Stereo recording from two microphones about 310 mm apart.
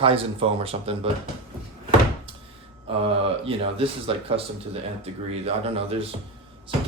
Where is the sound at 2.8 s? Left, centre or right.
Centre.